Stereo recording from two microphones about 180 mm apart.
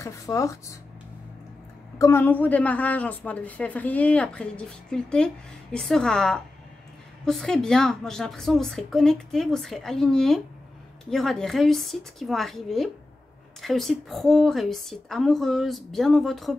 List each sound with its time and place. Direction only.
0.0 s a woman's voice: 15° left (ahead or behind)
2.0 s a woman's voice: 15° left (ahead or behind)